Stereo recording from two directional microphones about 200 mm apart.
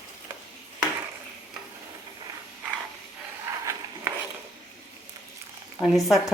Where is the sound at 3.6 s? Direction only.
15° right (ahead or behind).